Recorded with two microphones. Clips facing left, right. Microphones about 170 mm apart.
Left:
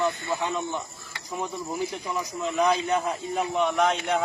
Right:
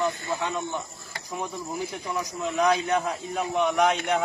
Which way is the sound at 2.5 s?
5° left (ahead or behind).